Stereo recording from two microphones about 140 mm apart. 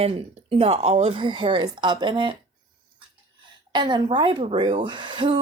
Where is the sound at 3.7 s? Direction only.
35° right (ahead or behind).